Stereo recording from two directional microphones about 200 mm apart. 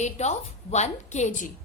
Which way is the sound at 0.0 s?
35° left (ahead or behind).